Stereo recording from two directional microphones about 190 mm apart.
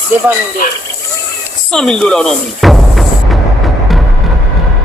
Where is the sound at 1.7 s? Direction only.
5° left (ahead or behind).